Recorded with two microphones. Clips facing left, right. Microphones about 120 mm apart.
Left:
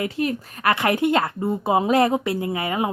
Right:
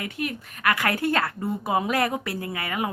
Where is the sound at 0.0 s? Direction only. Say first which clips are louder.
Left 7 dB; 35° left (ahead or behind).